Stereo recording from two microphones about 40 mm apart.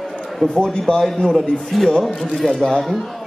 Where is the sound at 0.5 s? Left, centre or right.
Left.